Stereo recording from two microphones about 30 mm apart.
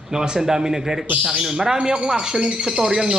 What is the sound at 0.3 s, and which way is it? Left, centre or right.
A man's voice, centre.